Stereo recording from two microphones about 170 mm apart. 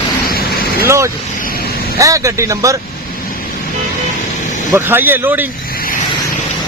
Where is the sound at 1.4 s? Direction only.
60° left (ahead or behind).